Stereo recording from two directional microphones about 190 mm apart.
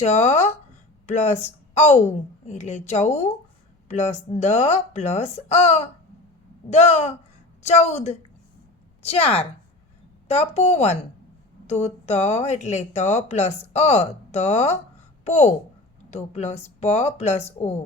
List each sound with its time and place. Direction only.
0.0 s speech: 35° left (ahead or behind)